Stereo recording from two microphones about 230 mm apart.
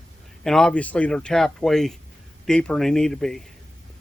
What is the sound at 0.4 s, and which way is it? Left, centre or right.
Speech, centre.